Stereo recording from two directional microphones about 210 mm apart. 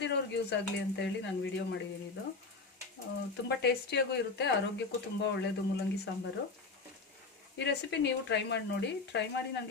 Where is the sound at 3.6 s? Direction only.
50° left (ahead or behind).